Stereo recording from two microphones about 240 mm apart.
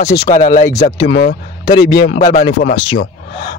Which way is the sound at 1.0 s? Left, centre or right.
Left.